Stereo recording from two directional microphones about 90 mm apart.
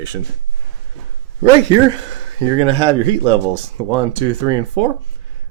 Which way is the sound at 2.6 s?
70° right (ahead or behind).